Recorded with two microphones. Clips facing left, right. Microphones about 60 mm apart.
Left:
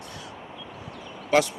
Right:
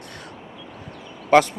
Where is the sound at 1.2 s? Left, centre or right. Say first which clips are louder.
Right 6 dB; right.